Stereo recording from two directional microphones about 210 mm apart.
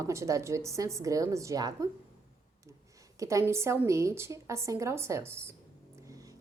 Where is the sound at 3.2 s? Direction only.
15° right (ahead or behind).